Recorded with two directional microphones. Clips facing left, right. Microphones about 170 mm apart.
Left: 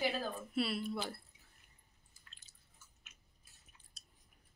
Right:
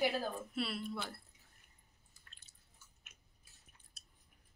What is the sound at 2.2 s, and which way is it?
Drip, 55° right (ahead or behind).